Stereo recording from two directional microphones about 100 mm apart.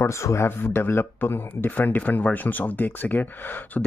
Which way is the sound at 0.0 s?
30° left (ahead or behind).